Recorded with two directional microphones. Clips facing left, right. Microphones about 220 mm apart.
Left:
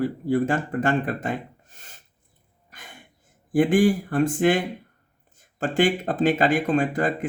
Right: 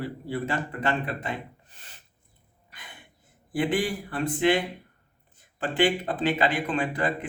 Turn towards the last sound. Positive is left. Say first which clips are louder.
# left 5 dB
turn(degrees=45)  # may be behind; listen again after turning